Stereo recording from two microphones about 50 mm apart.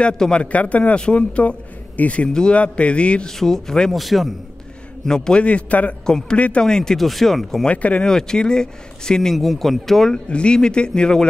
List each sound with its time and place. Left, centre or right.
0.2 s speech: left
3.3 s speech: centre
3.9 s speech: centre
5.0 s speech: centre
5.4 s speech: left
6.0 s speech: centre
6.3 s speech: left
6.6 s speech: centre
7.6 s speech: left
8.0 s speech: centre
9.3 s speech: centre
10.1 s speech: centre